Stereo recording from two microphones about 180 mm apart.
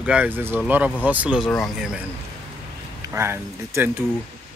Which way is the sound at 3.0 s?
15° right (ahead or behind).